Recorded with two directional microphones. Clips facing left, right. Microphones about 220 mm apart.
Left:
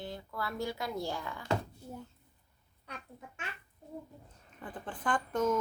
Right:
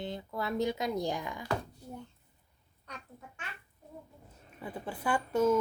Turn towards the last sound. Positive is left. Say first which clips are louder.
# right 3 dB
turn(degrees=-10)  # may be behind; listen again after turning